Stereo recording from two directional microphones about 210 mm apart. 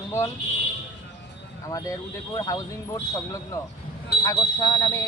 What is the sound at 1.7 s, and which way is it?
Speech, 15° left (ahead or behind).